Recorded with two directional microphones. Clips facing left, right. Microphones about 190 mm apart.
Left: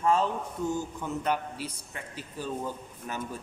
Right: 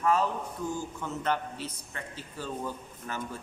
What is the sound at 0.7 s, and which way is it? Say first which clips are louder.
A man's voice: left 3 dB; 10° left (ahead or behind).